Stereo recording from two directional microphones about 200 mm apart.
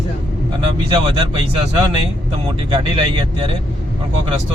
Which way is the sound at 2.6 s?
25° right (ahead or behind).